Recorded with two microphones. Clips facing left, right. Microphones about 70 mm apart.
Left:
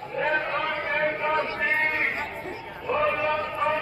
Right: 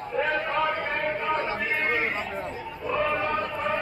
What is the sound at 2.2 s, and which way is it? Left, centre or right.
Chatter, left.